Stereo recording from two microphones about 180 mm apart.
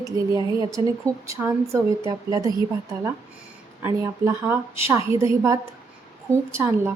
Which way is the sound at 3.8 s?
15° right (ahead or behind).